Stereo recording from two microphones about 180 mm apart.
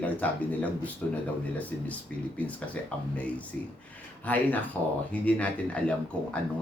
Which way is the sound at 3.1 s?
5° left (ahead or behind).